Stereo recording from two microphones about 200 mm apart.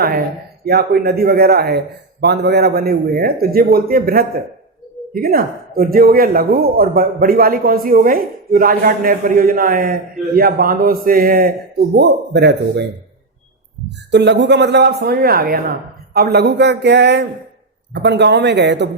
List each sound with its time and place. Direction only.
0.6 s speech: 50° right (ahead or behind)
14.1 s speech: 60° right (ahead or behind)